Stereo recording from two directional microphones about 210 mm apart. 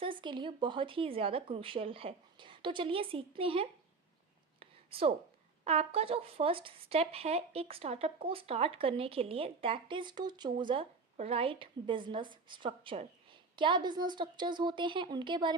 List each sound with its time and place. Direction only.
0.0 s speech: 25° right (ahead or behind)
4.6 s whispering: 25° right (ahead or behind)
5.6 s speech: 30° right (ahead or behind)